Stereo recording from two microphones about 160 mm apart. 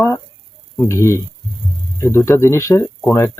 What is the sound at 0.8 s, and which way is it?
Speech, 15° left (ahead or behind).